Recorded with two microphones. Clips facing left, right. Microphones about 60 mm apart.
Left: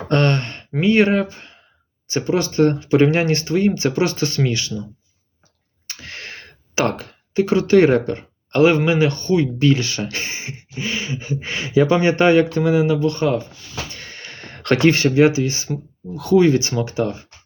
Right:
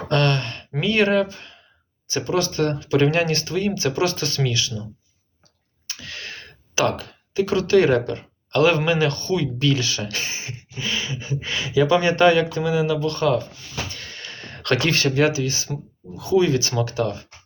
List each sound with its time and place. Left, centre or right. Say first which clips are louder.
0.1 s a sound: left 3 dB; left
0.9 s speech: left 3 dB; left
5.9 s speech: left 1 dB; left
12.8 s speech: left 3 dB; left
13.9 s a sound: left 1 dB; left
15.4 s speech: left 4 dB; left
16.1 s speech: left 4 dB; left
17.0 s speech: left 3 dB; centre